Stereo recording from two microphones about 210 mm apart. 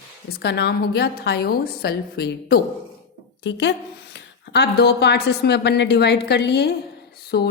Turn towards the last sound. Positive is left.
turn(degrees=50)  # may be behind; listen again after turning